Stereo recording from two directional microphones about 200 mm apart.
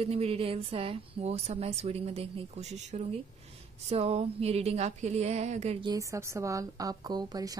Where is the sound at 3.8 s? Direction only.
30° right (ahead or behind).